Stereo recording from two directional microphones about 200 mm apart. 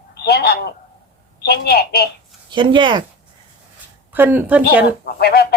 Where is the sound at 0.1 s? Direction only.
55° left (ahead or behind).